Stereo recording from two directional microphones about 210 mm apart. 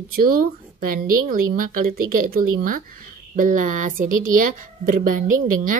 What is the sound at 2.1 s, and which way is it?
Speech, 45° right (ahead or behind).